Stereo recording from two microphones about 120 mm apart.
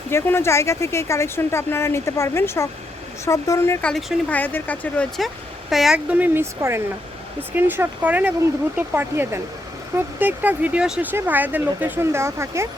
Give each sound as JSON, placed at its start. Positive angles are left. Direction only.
{"t": 0.1, "sound": "speech", "side_deg": 20}
{"t": 3.8, "sound": "speech", "side_deg": 10}
{"t": 5.7, "sound": "speech", "side_deg": 0}
{"t": 6.1, "sound": "speech", "side_deg": -15}